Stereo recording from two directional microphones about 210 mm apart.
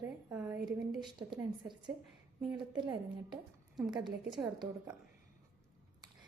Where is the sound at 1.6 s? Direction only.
20° right (ahead or behind).